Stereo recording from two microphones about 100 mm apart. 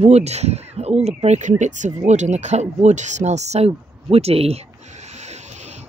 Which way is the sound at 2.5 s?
90° right.